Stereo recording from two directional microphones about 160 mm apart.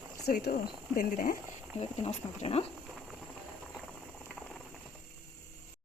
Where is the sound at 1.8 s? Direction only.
40° left (ahead or behind).